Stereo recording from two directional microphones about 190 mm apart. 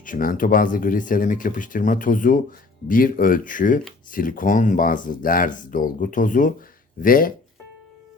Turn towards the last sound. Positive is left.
turn(degrees=50)  # may be behind; listen again after turning